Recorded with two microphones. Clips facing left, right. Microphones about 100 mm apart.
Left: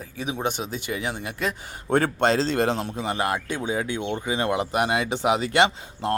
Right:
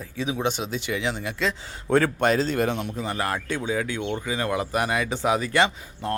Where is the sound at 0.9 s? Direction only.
45° left (ahead or behind).